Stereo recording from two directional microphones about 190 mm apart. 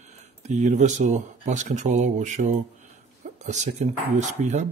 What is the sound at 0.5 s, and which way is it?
Speech, 40° right (ahead or behind).